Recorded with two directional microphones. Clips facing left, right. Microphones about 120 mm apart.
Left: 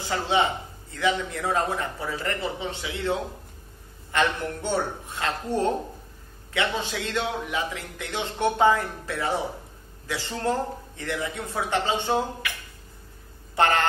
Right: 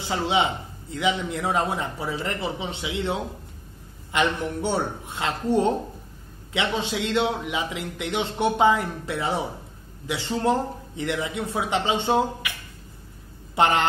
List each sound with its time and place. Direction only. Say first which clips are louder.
0.0 s a man's voice: right 1 dB; 20° right (ahead or behind)
13.6 s a man's voice: right 1 dB; 15° right (ahead or behind)